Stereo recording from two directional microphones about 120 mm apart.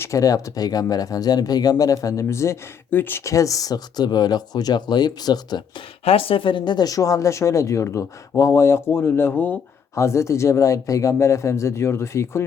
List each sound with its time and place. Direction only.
0.0 s speech: 25° left (ahead or behind)
6.1 s speech: 50° left (ahead or behind); by 12.5 s 20° left (ahead or behind)